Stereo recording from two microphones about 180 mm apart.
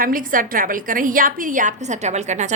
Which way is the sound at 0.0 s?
50° right (ahead or behind).